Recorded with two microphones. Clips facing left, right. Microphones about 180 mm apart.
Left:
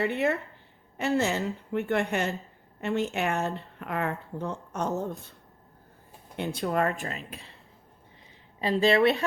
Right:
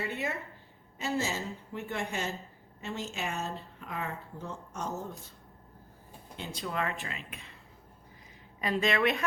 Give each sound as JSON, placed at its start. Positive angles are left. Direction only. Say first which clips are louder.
{"t": 0.0, "sound": "speech", "louder": "left 9 dB", "side_deg": 60}
{"t": 4.9, "sound": "a woman's voice", "louder": "left 7 dB", "side_deg": 20}
{"t": 6.3, "sound": "speech", "louder": "left 8 dB", "side_deg": 60}
{"t": 8.6, "sound": "a woman's voice", "louder": "left 6 dB", "side_deg": 30}